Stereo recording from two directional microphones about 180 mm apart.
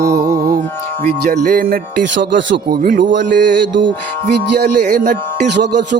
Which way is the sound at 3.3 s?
70° right (ahead or behind).